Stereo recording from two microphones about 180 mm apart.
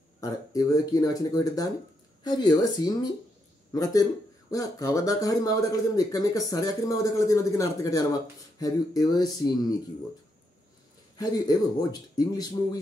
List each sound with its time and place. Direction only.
0.2 s speech: 20° left (ahead or behind)
11.1 s speech: 20° left (ahead or behind)